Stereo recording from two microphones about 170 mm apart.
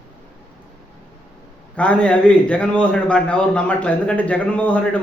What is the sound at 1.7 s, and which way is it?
A man's voice, 5° left (ahead or behind).